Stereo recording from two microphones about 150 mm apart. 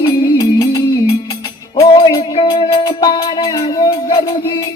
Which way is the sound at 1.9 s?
30° left (ahead or behind).